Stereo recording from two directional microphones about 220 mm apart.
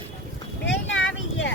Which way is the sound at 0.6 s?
60° left (ahead or behind).